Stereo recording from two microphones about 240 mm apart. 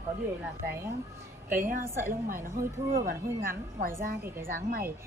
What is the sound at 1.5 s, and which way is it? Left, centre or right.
A woman's voice, right.